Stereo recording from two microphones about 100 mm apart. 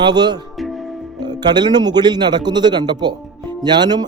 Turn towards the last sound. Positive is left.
turn(degrees=-45)  # may be behind; listen again after turning